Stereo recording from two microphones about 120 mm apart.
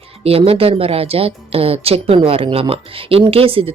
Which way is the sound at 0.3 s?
55° right (ahead or behind).